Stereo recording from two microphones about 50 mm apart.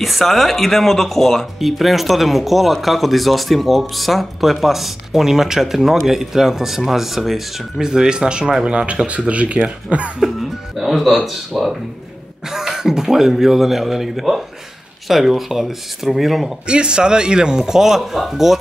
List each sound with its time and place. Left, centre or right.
0.0 s speech: centre; by 10.1 s right
10.2 s speech: centre
16.6 s speech: centre